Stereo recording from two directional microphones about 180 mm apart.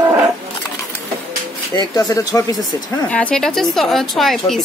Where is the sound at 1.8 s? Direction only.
20° left (ahead or behind).